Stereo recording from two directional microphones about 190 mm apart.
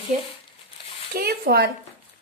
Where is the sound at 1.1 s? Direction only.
55° right (ahead or behind).